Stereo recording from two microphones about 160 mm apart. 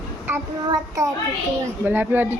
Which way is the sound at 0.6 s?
20° right (ahead or behind).